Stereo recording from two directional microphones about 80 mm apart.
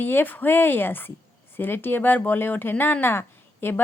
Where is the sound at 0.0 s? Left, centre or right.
Left.